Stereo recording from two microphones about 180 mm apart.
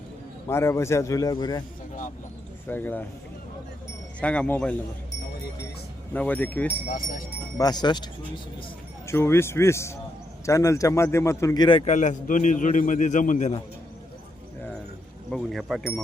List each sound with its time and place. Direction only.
0.4 s a man's voice: 15° left (ahead or behind)
2.6 s a man's voice: 10° left (ahead or behind)
4.2 s a man's voice: 5° left (ahead or behind)
6.1 s a man's voice: 10° left (ahead or behind)
6.8 s a man's voice: 50° left (ahead or behind)
7.6 s a man's voice: 25° left (ahead or behind)
11.9 s a man's voice: 45° left (ahead or behind)
15.3 s speech: centre (ahead or behind)